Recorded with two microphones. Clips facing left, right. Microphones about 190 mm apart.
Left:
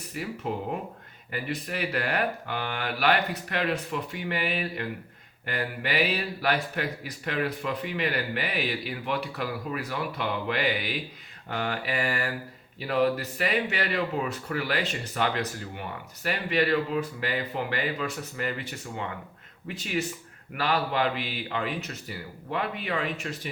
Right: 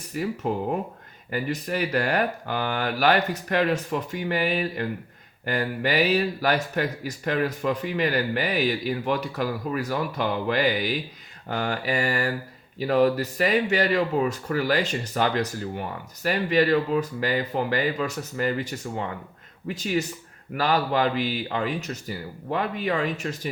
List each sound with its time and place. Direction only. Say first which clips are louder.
0.1 s speech: right 5 dB; 45° right (ahead or behind)